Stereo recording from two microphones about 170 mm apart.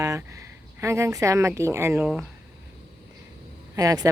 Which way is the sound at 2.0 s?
5° right (ahead or behind).